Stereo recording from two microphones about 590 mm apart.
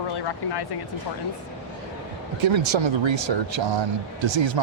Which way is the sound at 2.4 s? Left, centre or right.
Right.